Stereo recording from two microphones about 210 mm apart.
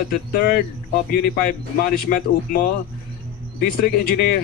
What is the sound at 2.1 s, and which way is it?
Speech, 50° left (ahead or behind).